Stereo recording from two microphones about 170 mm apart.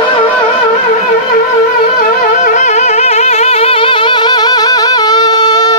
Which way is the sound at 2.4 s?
45° left (ahead or behind).